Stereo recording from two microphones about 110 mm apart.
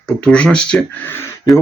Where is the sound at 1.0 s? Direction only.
20° left (ahead or behind).